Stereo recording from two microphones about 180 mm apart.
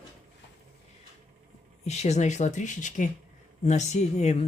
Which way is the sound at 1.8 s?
40° left (ahead or behind).